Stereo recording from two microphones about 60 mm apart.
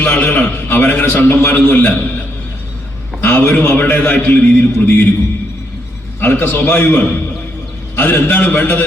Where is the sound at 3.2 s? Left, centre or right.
Left.